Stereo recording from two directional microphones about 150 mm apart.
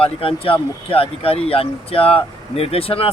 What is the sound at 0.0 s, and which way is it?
Speech, 40° left (ahead or behind).